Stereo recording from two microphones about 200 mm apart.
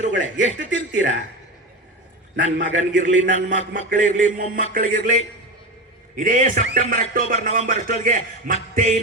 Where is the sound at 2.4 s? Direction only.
65° right (ahead or behind).